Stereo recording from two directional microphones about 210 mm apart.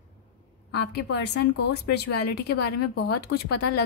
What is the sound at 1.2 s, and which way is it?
Speech, 55° left (ahead or behind).